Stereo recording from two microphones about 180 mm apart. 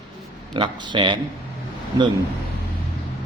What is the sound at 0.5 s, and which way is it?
Speech, 25° right (ahead or behind).